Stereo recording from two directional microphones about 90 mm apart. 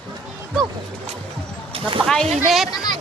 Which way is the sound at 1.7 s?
75° right (ahead or behind).